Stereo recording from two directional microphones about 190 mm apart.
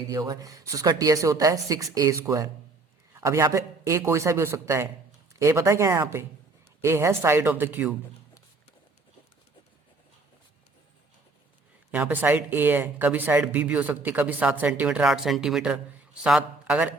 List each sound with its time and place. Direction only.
0.1 s speech: 20° right (ahead or behind)
11.9 s speech: 10° right (ahead or behind)